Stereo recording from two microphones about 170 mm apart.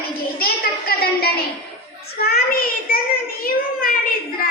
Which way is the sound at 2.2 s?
65° left (ahead or behind).